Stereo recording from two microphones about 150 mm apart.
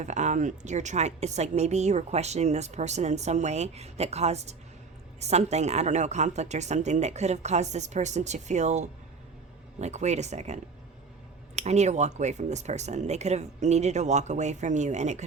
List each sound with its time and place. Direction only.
0.0 s speech: 50° right (ahead or behind)